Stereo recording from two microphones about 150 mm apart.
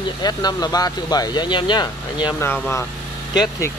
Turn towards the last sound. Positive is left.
turn(degrees=25)  # may be behind; listen again after turning